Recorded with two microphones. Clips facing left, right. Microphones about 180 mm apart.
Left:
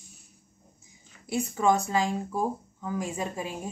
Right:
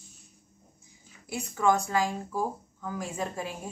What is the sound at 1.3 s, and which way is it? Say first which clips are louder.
A woman's voice: left 2 dB; 20° left (ahead or behind).